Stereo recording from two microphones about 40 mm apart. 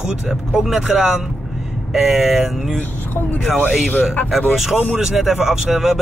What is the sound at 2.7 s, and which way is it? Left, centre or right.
Speech, left.